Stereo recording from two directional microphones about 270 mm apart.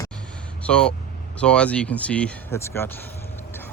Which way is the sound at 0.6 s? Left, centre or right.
Centre.